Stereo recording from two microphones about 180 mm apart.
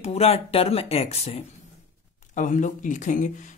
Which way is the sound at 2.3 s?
45° left (ahead or behind).